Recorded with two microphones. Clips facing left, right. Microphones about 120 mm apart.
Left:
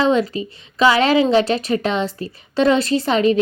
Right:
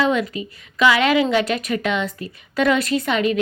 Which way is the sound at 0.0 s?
30° left (ahead or behind).